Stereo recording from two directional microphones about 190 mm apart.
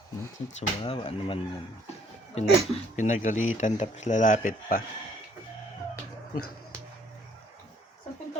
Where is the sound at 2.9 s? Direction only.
40° left (ahead or behind).